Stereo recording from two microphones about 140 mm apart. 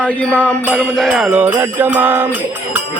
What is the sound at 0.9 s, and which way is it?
Music, centre (ahead or behind).